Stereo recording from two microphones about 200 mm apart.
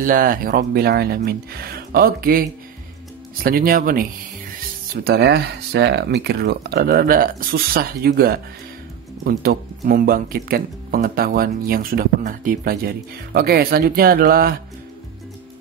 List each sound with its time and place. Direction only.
0.0 s speech: 45° right (ahead or behind)
3.4 s speech: 45° right (ahead or behind)